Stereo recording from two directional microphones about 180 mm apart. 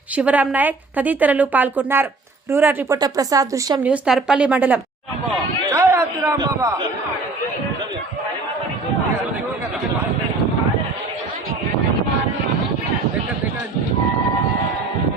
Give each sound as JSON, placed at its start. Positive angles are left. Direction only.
{"t": 0.2, "sound": "a woman's voice", "side_deg": -10}
{"t": 3.8, "sound": "a woman's voice", "side_deg": -5}